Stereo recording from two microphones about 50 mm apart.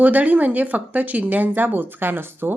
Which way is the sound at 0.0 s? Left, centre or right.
Right.